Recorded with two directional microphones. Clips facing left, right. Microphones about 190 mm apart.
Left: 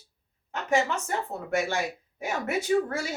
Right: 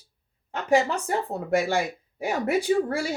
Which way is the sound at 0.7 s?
35° right (ahead or behind).